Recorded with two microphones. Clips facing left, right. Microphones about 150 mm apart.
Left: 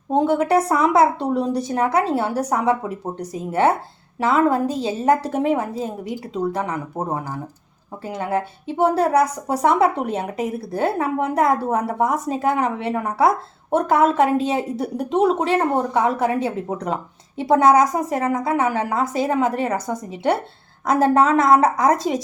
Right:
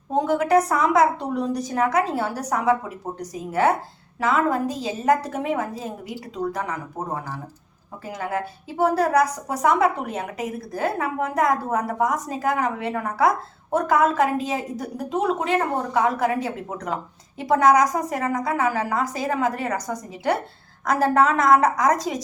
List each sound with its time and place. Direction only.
0.1 s a woman's voice: 30° left (ahead or behind)